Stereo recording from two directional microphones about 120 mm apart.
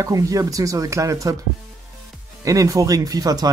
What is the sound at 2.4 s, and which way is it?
Speech, 25° right (ahead or behind).